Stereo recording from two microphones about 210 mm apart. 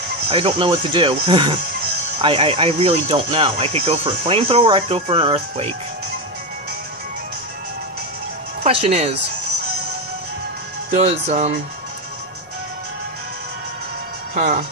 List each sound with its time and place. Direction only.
0.3 s speech: 25° right (ahead or behind)
8.6 s speech: 30° right (ahead or behind)
10.9 s speech: 30° right (ahead or behind)
14.3 s speech: 35° right (ahead or behind)